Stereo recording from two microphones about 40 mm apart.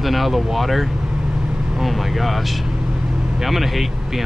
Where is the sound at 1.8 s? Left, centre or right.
Centre.